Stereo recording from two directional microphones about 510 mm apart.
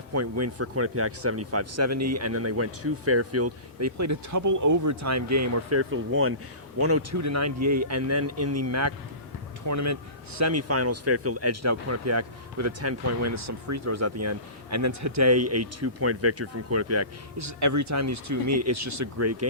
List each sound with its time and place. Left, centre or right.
0.1 s speech: right